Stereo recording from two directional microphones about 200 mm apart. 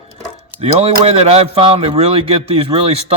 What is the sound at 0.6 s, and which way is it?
Speech, 30° right (ahead or behind).